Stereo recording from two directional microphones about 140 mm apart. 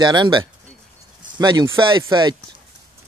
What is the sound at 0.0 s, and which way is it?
A man's voice, 30° right (ahead or behind).